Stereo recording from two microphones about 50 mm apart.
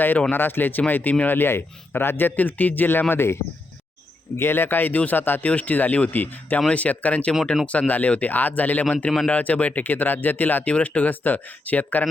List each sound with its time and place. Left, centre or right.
0.3 s speech: left
3.1 s speech: left
4.4 s speech: left